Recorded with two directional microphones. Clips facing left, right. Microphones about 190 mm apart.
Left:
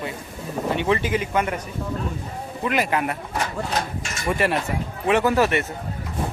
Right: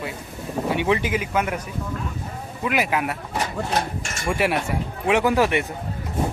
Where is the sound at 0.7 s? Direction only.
15° right (ahead or behind).